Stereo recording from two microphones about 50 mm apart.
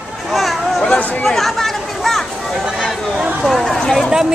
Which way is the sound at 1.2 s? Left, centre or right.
Centre.